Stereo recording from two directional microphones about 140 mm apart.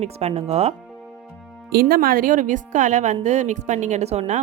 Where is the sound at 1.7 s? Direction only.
90° right.